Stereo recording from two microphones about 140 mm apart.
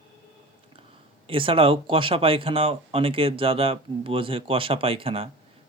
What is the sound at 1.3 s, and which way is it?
Speech, 40° right (ahead or behind).